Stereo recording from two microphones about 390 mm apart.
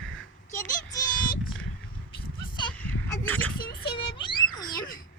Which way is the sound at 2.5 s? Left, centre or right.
Centre.